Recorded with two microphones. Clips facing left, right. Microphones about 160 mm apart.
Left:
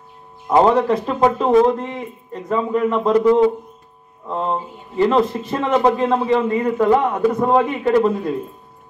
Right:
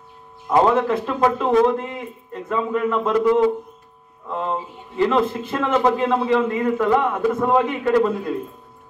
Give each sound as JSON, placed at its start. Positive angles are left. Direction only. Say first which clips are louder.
{"t": 0.5, "sound": "a man's voice", "louder": "left 3 dB", "side_deg": 20}